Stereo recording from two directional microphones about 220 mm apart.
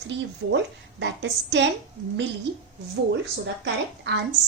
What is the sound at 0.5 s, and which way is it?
Speech, 55° right (ahead or behind).